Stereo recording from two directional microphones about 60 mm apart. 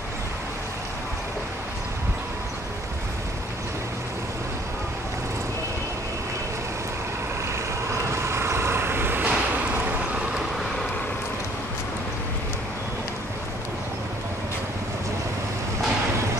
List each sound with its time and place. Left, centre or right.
8.3 s vehicle: right